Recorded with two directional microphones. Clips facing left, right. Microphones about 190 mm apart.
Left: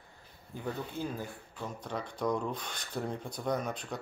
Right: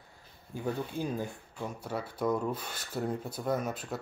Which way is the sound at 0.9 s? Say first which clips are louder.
Right 3 dB; 15° right (ahead or behind).